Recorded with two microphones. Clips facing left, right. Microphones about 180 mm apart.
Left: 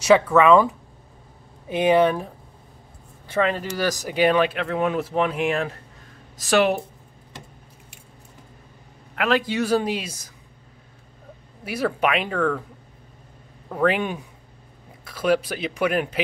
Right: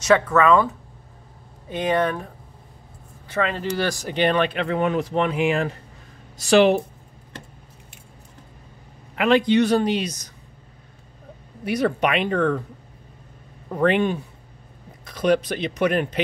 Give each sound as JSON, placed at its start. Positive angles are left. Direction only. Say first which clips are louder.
{"t": 0.0, "sound": "speech", "louder": "left 2 dB", "side_deg": 10}
{"t": 3.3, "sound": "speech", "louder": "left 2 dB", "side_deg": 25}
{"t": 4.1, "sound": "speech", "louder": "left 2 dB", "side_deg": 5}
{"t": 9.1, "sound": "speech", "louder": "right 5 dB", "side_deg": 0}
{"t": 11.6, "sound": "speech", "louder": "right 2 dB", "side_deg": 5}
{"t": 13.8, "sound": "speech", "louder": "right 3 dB", "side_deg": 10}